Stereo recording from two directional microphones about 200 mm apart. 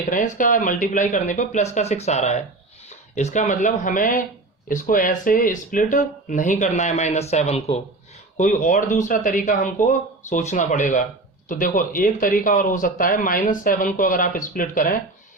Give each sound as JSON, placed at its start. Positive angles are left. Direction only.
{"t": 0.0, "sound": "speech", "side_deg": 40}